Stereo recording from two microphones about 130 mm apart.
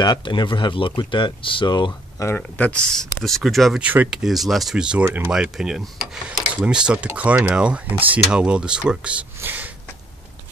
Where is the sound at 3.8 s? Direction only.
10° right (ahead or behind).